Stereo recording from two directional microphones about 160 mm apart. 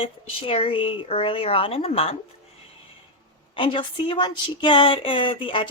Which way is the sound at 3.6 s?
30° left (ahead or behind).